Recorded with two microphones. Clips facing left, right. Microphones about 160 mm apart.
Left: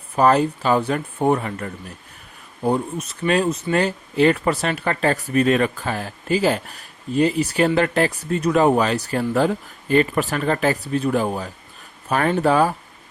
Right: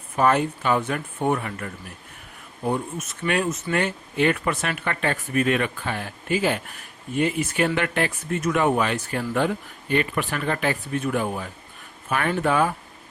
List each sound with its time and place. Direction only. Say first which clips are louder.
0.2 s speech: left 4 dB; 35° left (ahead or behind)